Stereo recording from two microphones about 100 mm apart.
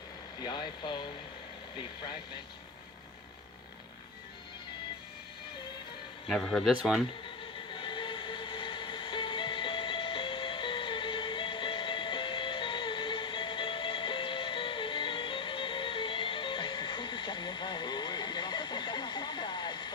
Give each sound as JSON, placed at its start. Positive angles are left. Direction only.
{"t": 0.3, "sound": "speech", "side_deg": 45}
{"t": 6.2, "sound": "speech", "side_deg": 5}
{"t": 7.7, "sound": "train", "side_deg": 55}